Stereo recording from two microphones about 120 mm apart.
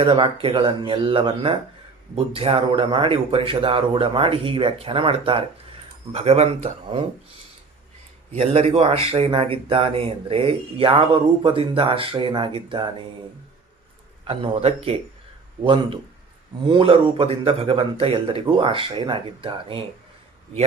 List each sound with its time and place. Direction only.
0.0 s speech: 50° right (ahead or behind)
8.4 s speech: 55° right (ahead or behind)
14.3 s speech: 55° right (ahead or behind)
15.6 s speech: 45° right (ahead or behind)